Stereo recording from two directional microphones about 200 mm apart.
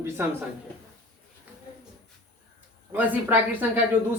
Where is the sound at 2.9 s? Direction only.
10° right (ahead or behind).